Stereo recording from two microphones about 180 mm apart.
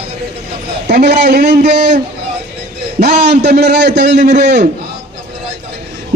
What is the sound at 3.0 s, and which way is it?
A man's voice, 70° right (ahead or behind).